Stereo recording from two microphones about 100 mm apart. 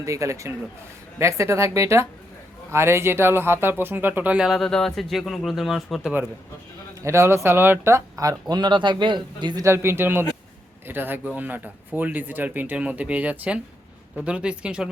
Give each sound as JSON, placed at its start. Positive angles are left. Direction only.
{"t": 0.0, "sound": "a man's voice", "side_deg": -30}
{"t": 4.4, "sound": "speech", "side_deg": 0}
{"t": 7.0, "sound": "speech", "side_deg": -25}
{"t": 9.6, "sound": "a man's voice", "side_deg": -25}